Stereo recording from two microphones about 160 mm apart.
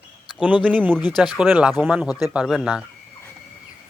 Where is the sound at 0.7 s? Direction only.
10° right (ahead or behind).